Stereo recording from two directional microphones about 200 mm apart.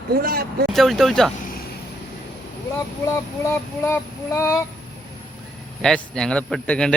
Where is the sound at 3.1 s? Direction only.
15° left (ahead or behind).